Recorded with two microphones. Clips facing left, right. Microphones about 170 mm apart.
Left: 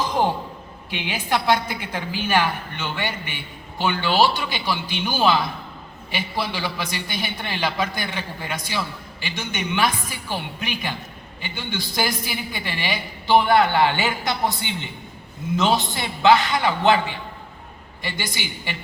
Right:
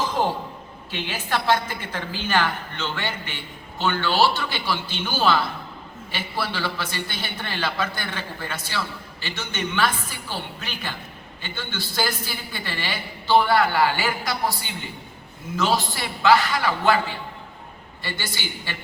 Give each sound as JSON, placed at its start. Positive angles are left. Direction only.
{"t": 0.9, "sound": "a woman's voice", "side_deg": 15}